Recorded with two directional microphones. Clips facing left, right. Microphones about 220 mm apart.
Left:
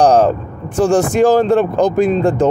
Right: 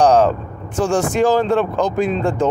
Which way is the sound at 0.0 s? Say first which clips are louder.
Left 2 dB; 35° left (ahead or behind).